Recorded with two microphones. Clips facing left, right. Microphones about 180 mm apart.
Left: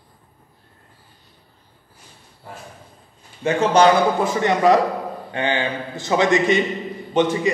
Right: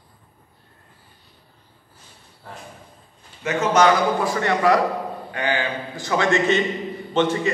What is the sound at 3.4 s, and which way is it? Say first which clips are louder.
A man's voice: left 3 dB; 30° left (ahead or behind).